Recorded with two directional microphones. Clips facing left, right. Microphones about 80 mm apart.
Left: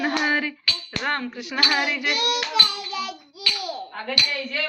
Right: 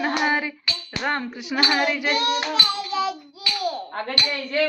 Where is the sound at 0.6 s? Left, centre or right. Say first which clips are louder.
Right 1 dB; centre.